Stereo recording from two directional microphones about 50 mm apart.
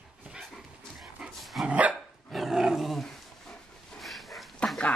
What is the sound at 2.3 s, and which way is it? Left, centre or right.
Roar, centre.